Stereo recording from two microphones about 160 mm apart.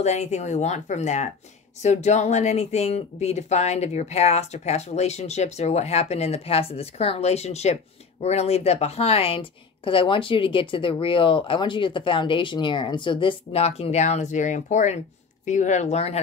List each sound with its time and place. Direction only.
0.0 s speech: 45° left (ahead or behind)